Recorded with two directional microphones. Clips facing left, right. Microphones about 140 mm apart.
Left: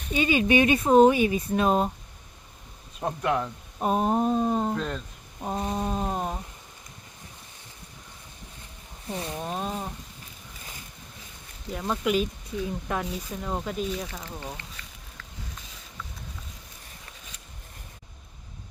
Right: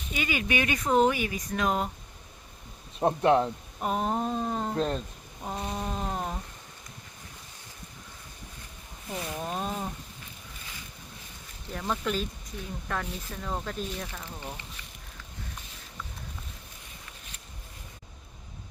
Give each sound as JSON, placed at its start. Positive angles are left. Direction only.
{"t": 0.1, "sound": "speech", "side_deg": 25}
{"t": 3.0, "sound": "speech", "side_deg": -30}
{"t": 3.8, "sound": "speech", "side_deg": 25}
{"t": 5.4, "sound": "a sound", "side_deg": 25}
{"t": 9.0, "sound": "speech", "side_deg": 30}
{"t": 9.4, "sound": "speech", "side_deg": 0}
{"t": 11.7, "sound": "speech", "side_deg": 10}